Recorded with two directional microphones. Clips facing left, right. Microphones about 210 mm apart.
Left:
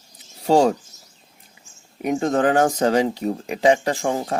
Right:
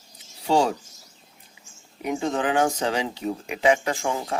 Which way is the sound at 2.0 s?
45° left (ahead or behind).